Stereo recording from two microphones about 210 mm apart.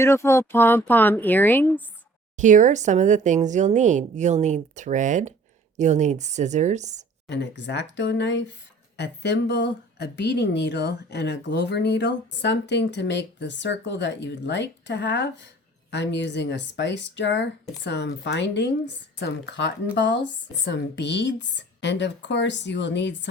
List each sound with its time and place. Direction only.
0.0 s speech: 10° left (ahead or behind)
2.4 s speech: 35° right (ahead or behind)
7.3 s speech: 55° left (ahead or behind)